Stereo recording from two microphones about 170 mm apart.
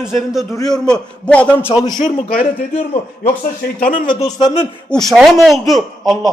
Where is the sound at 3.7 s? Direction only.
55° left (ahead or behind).